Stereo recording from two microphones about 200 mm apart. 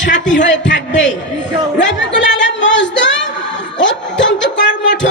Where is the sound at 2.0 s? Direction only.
65° left (ahead or behind).